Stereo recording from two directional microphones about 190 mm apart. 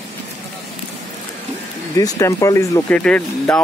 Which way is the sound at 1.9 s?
20° left (ahead or behind).